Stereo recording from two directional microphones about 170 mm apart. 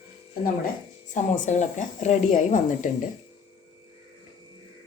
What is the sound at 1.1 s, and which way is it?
Speech, 45° left (ahead or behind).